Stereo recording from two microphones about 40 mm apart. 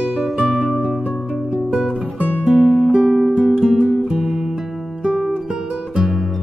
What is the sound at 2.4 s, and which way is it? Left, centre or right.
Music, centre.